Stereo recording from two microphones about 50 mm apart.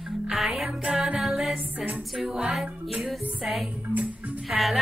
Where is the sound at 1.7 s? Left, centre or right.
Right.